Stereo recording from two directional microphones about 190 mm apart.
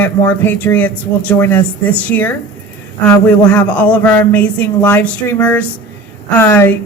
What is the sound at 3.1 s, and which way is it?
Speech, 5° left (ahead or behind).